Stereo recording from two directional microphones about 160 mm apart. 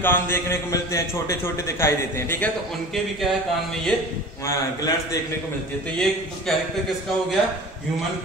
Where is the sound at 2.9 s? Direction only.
Centre (ahead or behind).